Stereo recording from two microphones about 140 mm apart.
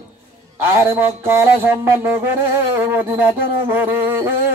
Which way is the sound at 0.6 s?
20° right (ahead or behind).